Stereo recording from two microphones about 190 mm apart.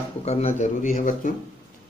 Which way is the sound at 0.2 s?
35° left (ahead or behind).